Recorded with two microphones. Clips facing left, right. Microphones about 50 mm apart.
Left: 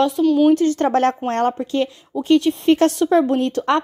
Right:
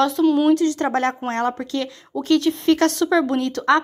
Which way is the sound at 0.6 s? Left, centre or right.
Left.